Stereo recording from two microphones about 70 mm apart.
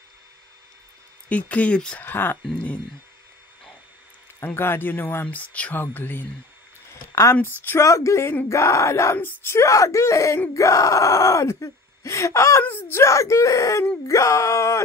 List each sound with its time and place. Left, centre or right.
1.3 s speech: centre
2.0 s speech: left
2.4 s speech: centre
4.6 s speech: left
7.1 s speech: left
9.1 s speech: left
12.6 s speech: left
13.0 s speech: left